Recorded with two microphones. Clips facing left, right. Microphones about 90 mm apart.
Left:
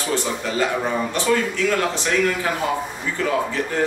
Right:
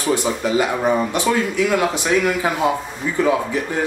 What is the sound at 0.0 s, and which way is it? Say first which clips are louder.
Speech: right 4 dB; 15° right (ahead or behind).